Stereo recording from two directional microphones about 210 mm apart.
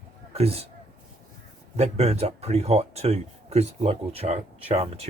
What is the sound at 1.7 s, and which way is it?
Speech, 30° right (ahead or behind).